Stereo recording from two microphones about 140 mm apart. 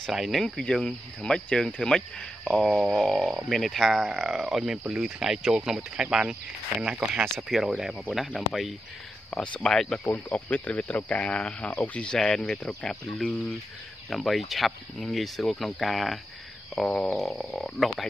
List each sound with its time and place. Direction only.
0.0 s speech: centre (ahead or behind)